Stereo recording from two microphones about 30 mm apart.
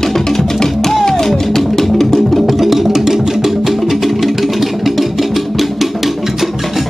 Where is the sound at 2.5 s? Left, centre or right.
Centre.